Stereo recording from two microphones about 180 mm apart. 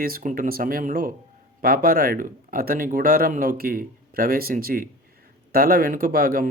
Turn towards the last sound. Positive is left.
turn(degrees=-55)  # may be behind; listen again after turning